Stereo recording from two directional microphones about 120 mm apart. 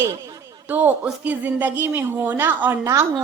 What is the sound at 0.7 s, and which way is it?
A woman's voice, 15° right (ahead or behind).